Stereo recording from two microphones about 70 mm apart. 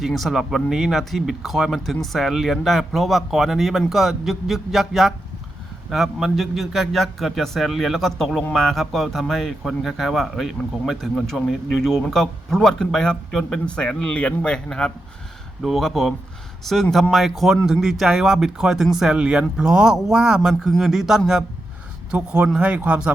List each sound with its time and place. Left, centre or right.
0.0 s speech: centre